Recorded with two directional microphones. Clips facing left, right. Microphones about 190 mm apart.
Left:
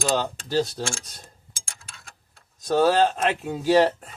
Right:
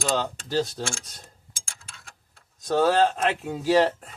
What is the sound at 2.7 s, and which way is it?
Speech, 15° left (ahead or behind).